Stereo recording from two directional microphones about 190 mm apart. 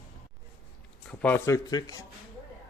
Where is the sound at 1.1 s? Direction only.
10° left (ahead or behind).